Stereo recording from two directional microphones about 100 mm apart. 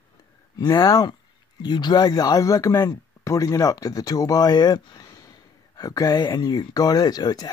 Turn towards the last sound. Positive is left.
turn(degrees=40)  # may be behind; listen again after turning